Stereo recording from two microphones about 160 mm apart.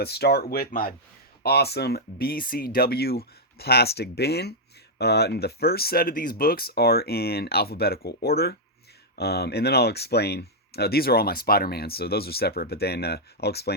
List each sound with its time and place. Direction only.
0.0 s speech: 90° left; by 0.9 s 65° left (ahead or behind)
1.4 s speech: 90° left